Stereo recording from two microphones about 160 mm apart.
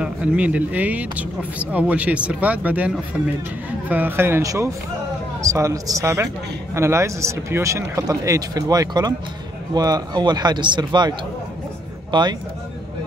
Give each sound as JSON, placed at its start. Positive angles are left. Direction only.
{"t": 0.0, "sound": "speech", "side_deg": -5}
{"t": 3.9, "sound": "a man's voice", "side_deg": -10}